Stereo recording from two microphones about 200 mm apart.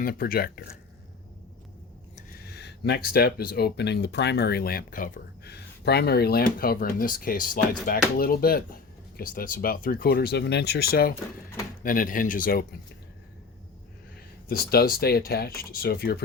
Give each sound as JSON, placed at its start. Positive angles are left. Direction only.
{"t": 0.0, "sound": "speech", "side_deg": 45}
{"t": 2.1, "sound": "speech", "side_deg": 50}
{"t": 14.4, "sound": "speech", "side_deg": 50}